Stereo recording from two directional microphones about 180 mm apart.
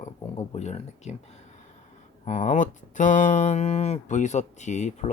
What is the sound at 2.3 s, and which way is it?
Speech, 40° left (ahead or behind).